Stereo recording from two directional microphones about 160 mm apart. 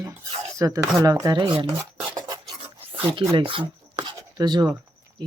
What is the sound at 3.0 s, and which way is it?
Speech, 35° right (ahead or behind).